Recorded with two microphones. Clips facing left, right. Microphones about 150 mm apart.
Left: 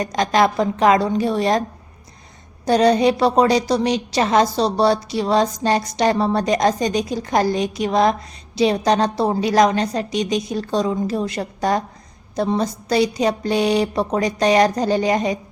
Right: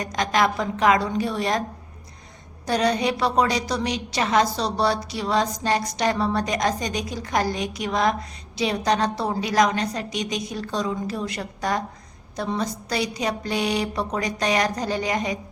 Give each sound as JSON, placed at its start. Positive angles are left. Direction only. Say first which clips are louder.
{"t": 0.0, "sound": "a woman's voice", "louder": "left 5 dB", "side_deg": 30}
{"t": 2.6, "sound": "a woman's voice", "louder": "left 7 dB", "side_deg": 30}